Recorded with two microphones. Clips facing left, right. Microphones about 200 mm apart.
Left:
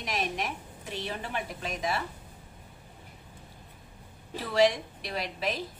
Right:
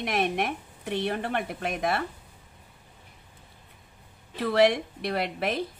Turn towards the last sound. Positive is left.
turn(degrees=-60)  # may be behind; listen again after turning